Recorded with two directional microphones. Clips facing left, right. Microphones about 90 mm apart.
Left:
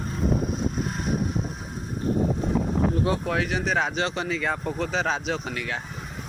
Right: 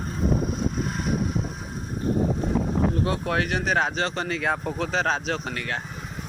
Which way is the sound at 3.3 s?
60° right (ahead or behind).